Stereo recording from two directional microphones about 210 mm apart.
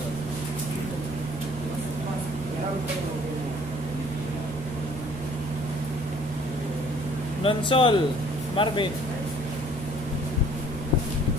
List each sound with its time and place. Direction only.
7.4 s speech: 25° left (ahead or behind)